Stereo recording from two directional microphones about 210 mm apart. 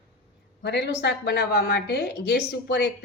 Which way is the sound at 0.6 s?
55° left (ahead or behind).